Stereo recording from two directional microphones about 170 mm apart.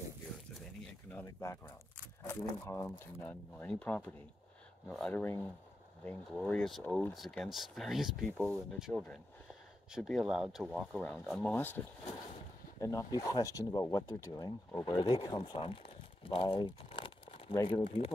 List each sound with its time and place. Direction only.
1.2 s speech: 15° left (ahead or behind); by 11.0 s centre (ahead or behind)
11.0 s speech: 10° left (ahead or behind)
11.5 s speech: 10° left (ahead or behind)
12.8 s speech: 20° left (ahead or behind)
15.0 s speech: 30° left (ahead or behind)